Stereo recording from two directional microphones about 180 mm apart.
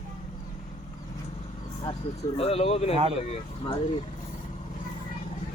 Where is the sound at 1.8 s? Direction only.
30° left (ahead or behind).